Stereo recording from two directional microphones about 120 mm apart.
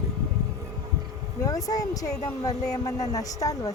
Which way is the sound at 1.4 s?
30° left (ahead or behind).